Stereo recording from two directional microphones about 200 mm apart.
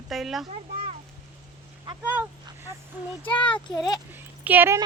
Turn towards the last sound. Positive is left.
turn(degrees=-10)  # may be behind; listen again after turning